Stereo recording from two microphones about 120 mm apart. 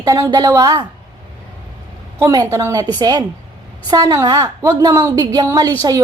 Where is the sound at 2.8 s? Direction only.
35° right (ahead or behind).